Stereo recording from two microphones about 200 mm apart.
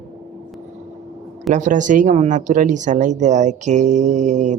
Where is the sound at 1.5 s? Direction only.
40° right (ahead or behind).